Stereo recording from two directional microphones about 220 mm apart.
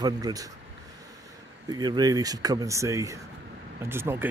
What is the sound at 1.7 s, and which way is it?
Speech, 20° right (ahead or behind).